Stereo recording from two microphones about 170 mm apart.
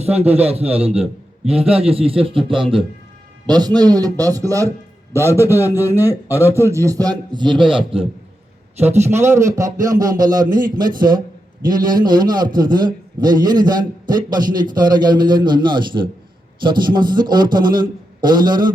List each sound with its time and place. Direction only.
0.1 s a man's voice: 10° right (ahead or behind)
0.4 s a man's voice: 35° right (ahead or behind)
9.0 s a man's voice: 15° right (ahead or behind)